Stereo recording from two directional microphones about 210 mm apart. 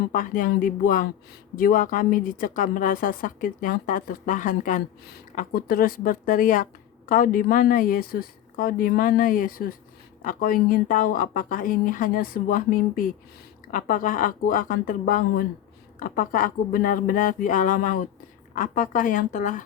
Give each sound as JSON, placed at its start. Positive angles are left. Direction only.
{"t": 0.1, "sound": "a woman's voice", "side_deg": 40}